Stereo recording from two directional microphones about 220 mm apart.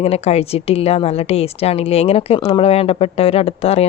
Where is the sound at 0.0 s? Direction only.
30° left (ahead or behind).